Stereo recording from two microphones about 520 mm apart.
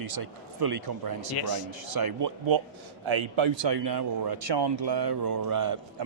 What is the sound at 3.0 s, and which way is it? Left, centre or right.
Speech, right.